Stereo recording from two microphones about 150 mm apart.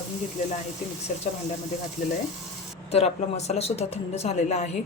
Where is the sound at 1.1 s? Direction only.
55° left (ahead or behind).